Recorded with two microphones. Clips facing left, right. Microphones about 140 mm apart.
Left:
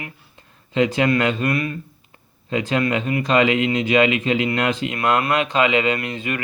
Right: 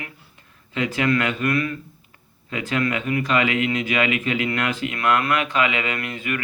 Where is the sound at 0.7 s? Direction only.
25° left (ahead or behind).